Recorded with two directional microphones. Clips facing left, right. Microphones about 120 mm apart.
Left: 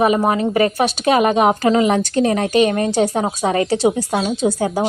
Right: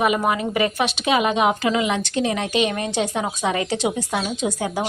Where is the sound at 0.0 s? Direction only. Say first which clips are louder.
Left 5 dB; 35° left (ahead or behind).